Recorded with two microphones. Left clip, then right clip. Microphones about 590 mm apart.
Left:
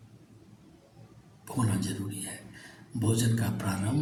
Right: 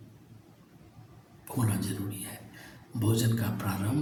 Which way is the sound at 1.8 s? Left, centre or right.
Right.